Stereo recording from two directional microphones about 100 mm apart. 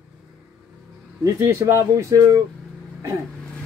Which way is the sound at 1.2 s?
25° right (ahead or behind).